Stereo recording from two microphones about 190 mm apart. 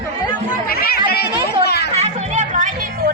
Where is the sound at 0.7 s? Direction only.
50° left (ahead or behind).